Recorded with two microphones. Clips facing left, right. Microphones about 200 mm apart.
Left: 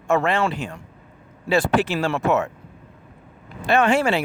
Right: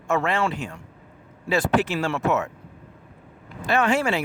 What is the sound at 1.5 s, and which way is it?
Speech, 30° left (ahead or behind).